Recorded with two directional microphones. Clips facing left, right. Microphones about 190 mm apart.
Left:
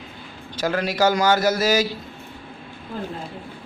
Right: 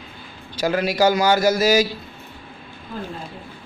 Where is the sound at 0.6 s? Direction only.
10° right (ahead or behind).